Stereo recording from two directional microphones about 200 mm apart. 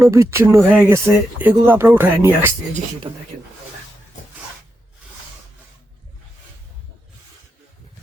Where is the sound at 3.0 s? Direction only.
20° right (ahead or behind).